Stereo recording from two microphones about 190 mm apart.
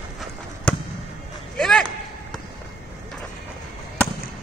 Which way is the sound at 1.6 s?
5° left (ahead or behind).